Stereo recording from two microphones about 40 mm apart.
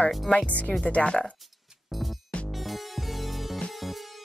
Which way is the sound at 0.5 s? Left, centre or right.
Left.